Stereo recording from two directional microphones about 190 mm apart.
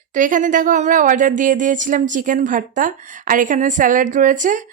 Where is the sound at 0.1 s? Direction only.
45° right (ahead or behind).